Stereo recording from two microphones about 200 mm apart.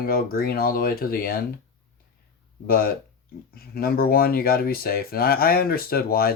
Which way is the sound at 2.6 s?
50° left (ahead or behind).